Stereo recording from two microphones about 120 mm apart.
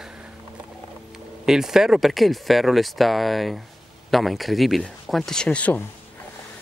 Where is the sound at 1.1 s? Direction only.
5° right (ahead or behind); by 5.9 s 10° left (ahead or behind).